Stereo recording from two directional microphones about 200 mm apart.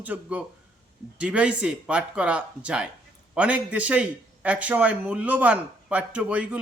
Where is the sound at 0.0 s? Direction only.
5° right (ahead or behind).